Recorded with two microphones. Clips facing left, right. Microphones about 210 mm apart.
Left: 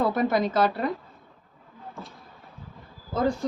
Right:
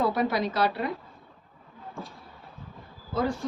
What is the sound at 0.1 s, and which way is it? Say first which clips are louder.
Speech: left 3 dB; 50° left (ahead or behind).